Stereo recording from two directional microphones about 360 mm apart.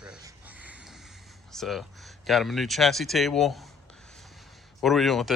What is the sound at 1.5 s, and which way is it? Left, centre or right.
Speech, centre.